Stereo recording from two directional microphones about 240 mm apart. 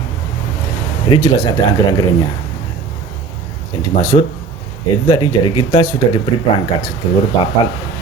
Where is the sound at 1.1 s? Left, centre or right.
Centre.